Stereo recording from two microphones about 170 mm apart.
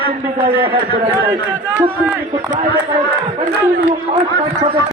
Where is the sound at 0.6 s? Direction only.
30° right (ahead or behind).